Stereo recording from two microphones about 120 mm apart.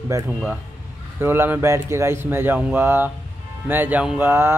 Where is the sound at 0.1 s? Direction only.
25° right (ahead or behind).